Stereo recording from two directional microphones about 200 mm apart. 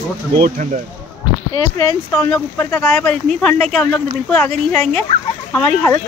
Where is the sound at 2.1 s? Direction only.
5° left (ahead or behind).